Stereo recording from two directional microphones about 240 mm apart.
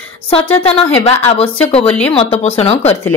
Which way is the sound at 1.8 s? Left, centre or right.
Centre.